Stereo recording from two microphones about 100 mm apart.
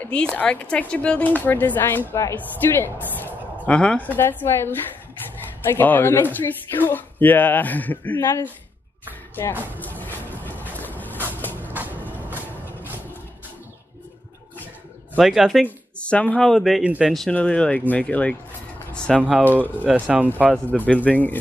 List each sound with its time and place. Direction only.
0.0 s a woman's voice: 10° left (ahead or behind)
4.2 s speech: 20° left (ahead or behind)
9.3 s speech: 20° left (ahead or behind)
9.8 s music: 15° left (ahead or behind)
10.3 s boat: 20° left (ahead or behind)
11.7 s vehicle: 15° right (ahead or behind)
15.1 s speech: 5° right (ahead or behind)
15.6 s speech: 10° left (ahead or behind)
16.8 s speech: 10° right (ahead or behind)
17.3 s speech: 10° left (ahead or behind)
19.5 s speech: 15° right (ahead or behind)
20.7 s speech: 15° left (ahead or behind)